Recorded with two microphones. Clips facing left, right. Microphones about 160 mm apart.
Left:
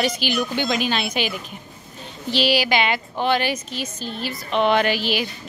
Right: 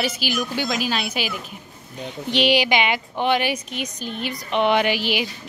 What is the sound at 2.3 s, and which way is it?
A woman's voice, 20° right (ahead or behind).